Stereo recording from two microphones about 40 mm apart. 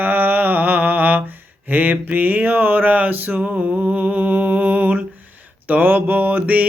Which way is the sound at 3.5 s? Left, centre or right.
Right.